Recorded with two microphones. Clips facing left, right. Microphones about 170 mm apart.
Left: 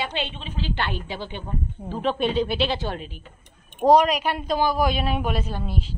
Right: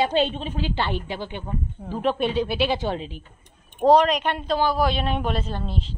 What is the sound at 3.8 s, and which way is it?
A woman's voice, 10° left (ahead or behind).